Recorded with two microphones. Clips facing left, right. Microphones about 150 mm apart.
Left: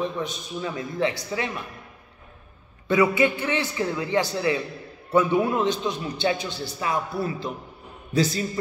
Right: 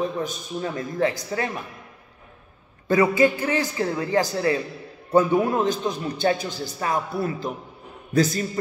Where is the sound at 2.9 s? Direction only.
40° right (ahead or behind).